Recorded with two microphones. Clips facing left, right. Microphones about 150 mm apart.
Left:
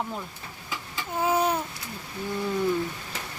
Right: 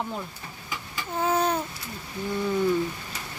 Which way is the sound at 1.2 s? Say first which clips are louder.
Even; 5° left (ahead or behind).